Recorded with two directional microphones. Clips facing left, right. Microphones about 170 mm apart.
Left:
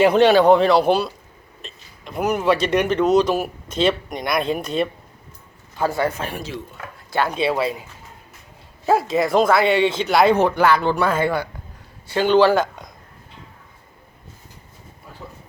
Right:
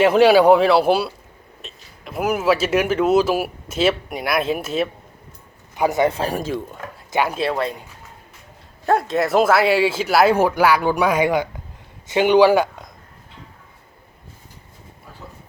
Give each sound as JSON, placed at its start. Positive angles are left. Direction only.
{"t": 0.0, "sound": "speech", "side_deg": -5}
{"t": 5.7, "sound": "a man's voice", "side_deg": -15}
{"t": 6.1, "sound": "speech", "side_deg": -40}
{"t": 7.1, "sound": "speech", "side_deg": -15}
{"t": 7.3, "sound": "speech", "side_deg": 0}
{"t": 8.9, "sound": "speech", "side_deg": 0}